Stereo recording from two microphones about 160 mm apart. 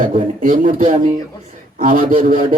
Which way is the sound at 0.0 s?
60° right (ahead or behind).